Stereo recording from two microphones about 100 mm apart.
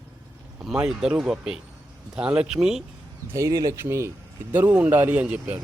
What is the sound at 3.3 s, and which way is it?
Speech, 35° right (ahead or behind).